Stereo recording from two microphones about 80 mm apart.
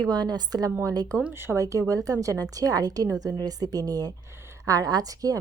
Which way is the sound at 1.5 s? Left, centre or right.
Right.